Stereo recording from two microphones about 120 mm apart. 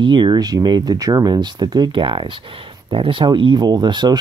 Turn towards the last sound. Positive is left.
turn(degrees=-35)  # may be behind; listen again after turning